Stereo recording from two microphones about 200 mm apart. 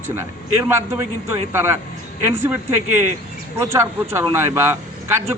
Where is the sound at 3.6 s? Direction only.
15° right (ahead or behind).